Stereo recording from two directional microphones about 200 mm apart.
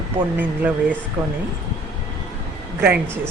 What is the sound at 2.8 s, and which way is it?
Speech, 10° right (ahead or behind).